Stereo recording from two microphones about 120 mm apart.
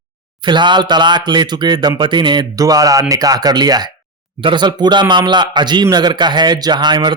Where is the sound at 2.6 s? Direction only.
30° right (ahead or behind).